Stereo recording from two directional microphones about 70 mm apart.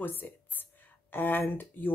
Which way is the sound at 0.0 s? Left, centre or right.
Left.